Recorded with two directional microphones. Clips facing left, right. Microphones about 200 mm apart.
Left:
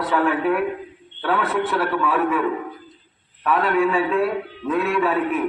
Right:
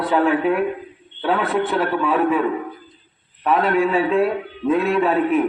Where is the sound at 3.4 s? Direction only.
25° right (ahead or behind).